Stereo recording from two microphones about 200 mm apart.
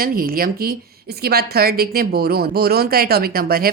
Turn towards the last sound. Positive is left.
turn(degrees=-50)  # may be behind; listen again after turning